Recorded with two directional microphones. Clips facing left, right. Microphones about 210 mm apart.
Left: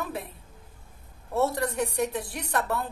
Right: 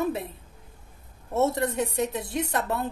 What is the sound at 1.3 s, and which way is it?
A woman's voice, 20° right (ahead or behind).